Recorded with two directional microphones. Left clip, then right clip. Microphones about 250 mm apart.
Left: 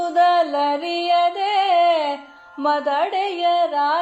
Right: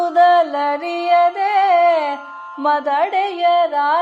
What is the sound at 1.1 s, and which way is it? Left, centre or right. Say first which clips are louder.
Music: right 5 dB; centre.